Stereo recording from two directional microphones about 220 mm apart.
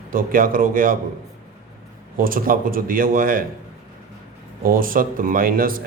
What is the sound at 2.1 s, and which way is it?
Speech, 40° right (ahead or behind).